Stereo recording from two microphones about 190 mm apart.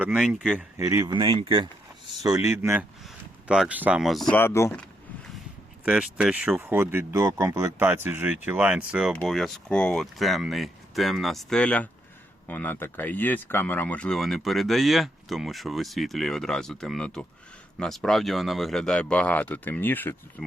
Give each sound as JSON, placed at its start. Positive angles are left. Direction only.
{"t": 0.0, "sound": "speech", "side_deg": -5}
{"t": 0.8, "sound": "speech", "side_deg": -15}
{"t": 2.2, "sound": "speech", "side_deg": -15}
{"t": 4.4, "sound": "speech", "side_deg": 15}
{"t": 5.8, "sound": "speech", "side_deg": -5}